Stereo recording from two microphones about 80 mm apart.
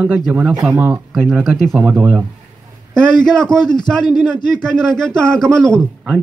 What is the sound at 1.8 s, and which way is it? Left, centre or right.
Speech, centre.